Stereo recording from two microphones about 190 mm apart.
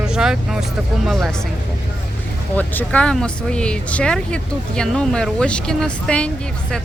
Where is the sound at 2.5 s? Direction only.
10° left (ahead or behind).